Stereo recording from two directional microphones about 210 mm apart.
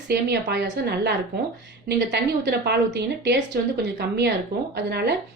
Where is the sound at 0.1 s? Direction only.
50° right (ahead or behind).